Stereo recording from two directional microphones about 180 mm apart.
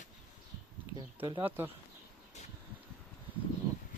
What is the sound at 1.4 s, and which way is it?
Speech, 10° right (ahead or behind).